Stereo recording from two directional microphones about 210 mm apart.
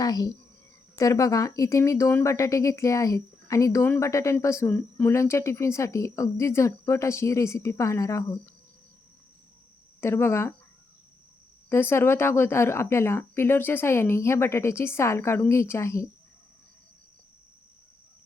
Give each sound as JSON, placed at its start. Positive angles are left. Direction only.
{"t": 0.0, "sound": "speech", "side_deg": 20}
{"t": 10.0, "sound": "speech", "side_deg": 10}
{"t": 11.7, "sound": "speech", "side_deg": 10}